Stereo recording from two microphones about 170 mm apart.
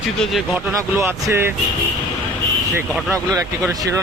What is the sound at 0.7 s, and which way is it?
Speech, 15° right (ahead or behind).